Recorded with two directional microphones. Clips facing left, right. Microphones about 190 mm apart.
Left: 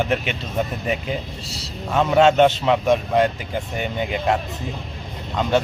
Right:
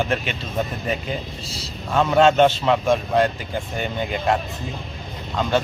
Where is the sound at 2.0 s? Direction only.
15° left (ahead or behind).